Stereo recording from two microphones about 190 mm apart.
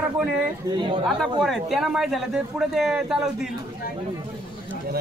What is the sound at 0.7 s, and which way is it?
Speech, 25° right (ahead or behind).